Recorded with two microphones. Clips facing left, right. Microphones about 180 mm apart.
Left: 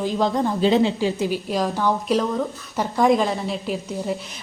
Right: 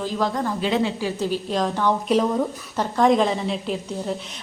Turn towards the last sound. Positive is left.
turn(degrees=5)  # may be behind; listen again after turning